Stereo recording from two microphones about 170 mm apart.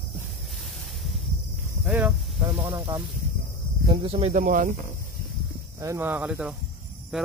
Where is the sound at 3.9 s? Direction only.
35° right (ahead or behind); by 4.7 s 50° right (ahead or behind).